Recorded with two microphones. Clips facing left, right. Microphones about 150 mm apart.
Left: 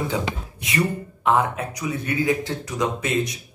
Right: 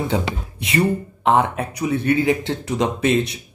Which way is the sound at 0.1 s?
30° right (ahead or behind).